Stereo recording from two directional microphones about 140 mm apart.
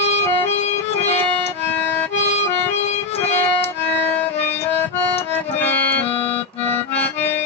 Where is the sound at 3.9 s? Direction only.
15° left (ahead or behind).